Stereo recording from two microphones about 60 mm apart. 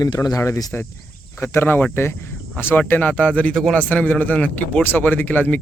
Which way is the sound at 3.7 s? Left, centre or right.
Left.